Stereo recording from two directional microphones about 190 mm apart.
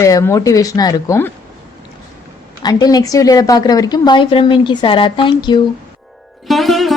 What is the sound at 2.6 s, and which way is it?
A woman's voice, 20° left (ahead or behind).